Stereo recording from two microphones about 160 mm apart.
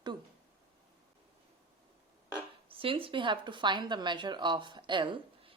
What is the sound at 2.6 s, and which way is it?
Speech, 35° right (ahead or behind).